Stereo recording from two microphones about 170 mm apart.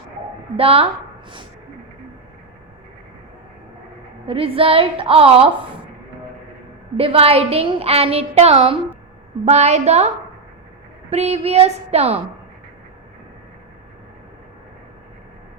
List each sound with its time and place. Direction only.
0.5 s a woman's voice: 35° right (ahead or behind)
4.3 s a woman's voice: 35° right (ahead or behind)
6.9 s a woman's voice: 35° right (ahead or behind)
11.1 s a woman's voice: 40° right (ahead or behind)